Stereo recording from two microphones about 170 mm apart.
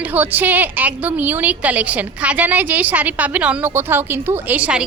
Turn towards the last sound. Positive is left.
turn(degrees=-5)  # may be behind; listen again after turning